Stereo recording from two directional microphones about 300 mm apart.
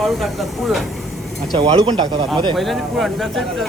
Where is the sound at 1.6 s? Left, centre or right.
Centre.